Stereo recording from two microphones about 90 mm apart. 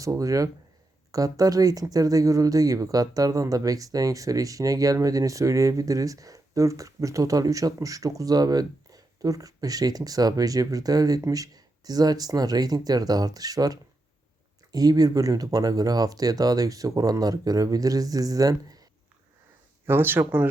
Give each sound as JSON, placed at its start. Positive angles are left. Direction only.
{"t": 0.0, "sound": "speech", "side_deg": -40}
{"t": 19.8, "sound": "speech", "side_deg": -25}